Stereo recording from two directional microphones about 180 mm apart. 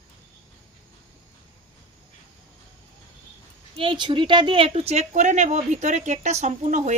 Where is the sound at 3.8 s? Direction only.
25° right (ahead or behind).